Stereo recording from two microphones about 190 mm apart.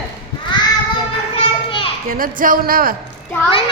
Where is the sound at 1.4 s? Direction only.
30° left (ahead or behind).